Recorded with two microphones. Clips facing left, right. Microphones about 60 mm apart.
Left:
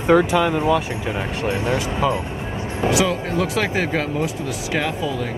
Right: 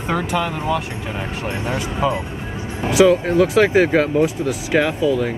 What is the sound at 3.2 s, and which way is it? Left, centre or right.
Speech, right.